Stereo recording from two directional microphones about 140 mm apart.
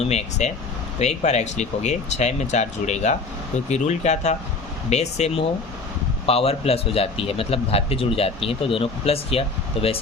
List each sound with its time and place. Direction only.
0.0 s a man's voice: 50° left (ahead or behind)